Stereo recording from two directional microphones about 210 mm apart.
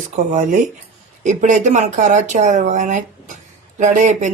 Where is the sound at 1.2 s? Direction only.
35° right (ahead or behind).